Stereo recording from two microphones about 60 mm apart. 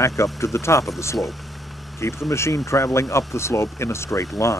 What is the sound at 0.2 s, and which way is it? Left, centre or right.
Speech, left.